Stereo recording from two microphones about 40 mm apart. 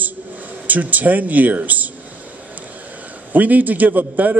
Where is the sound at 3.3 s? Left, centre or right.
Right.